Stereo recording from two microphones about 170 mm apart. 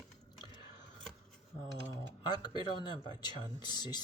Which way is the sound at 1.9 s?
25° left (ahead or behind).